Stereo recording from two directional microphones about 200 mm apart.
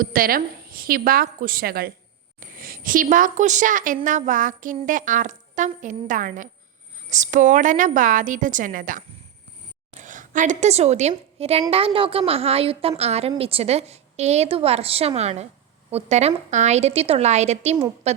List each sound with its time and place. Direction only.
0.0 s a woman's voice: 45° right (ahead or behind)